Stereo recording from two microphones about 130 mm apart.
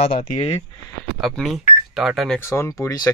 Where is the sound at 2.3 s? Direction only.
20° left (ahead or behind).